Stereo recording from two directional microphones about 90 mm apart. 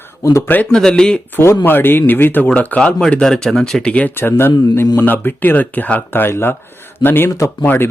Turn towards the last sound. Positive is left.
turn(degrees=25)  # may be behind; listen again after turning